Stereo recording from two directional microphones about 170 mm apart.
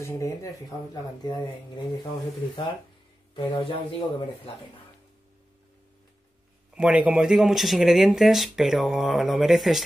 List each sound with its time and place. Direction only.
0.0 s speech: 20° left (ahead or behind)
3.3 s speech: 30° left (ahead or behind)
6.7 s speech: 5° right (ahead or behind)